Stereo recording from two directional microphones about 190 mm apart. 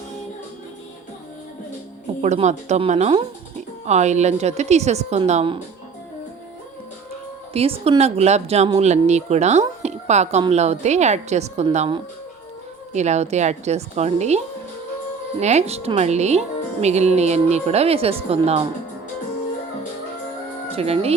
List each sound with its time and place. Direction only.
2.2 s speech: 35° right (ahead or behind)
7.5 s speech: 30° right (ahead or behind)
20.7 s speech: 30° right (ahead or behind)